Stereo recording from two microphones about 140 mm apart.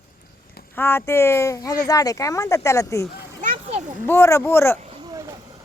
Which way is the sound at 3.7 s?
55° right (ahead or behind).